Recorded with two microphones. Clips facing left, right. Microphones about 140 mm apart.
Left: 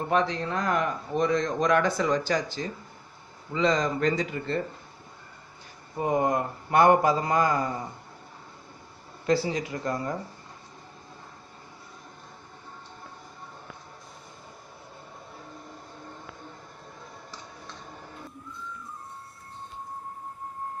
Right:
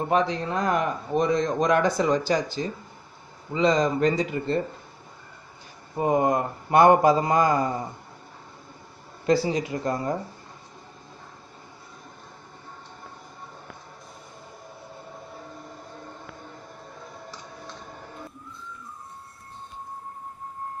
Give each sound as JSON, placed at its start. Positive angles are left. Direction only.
{"t": 0.1, "sound": "speech", "side_deg": -15}
{"t": 5.9, "sound": "a man's voice", "side_deg": -20}
{"t": 9.2, "sound": "a man's voice", "side_deg": -15}